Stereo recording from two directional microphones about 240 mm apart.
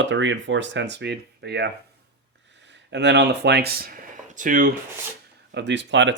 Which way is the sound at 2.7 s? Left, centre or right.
Right.